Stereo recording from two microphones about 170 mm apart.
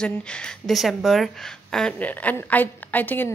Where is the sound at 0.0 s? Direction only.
5° left (ahead or behind).